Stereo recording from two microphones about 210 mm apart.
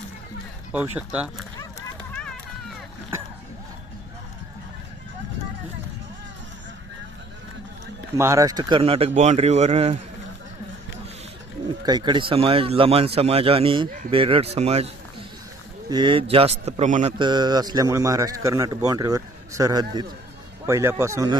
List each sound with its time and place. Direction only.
0.7 s speech: 5° right (ahead or behind)
8.1 s a man's voice: 15° right (ahead or behind); by 10.0 s 30° right (ahead or behind)
11.9 s a man's voice: 20° right (ahead or behind)
15.9 s a man's voice: 20° right (ahead or behind)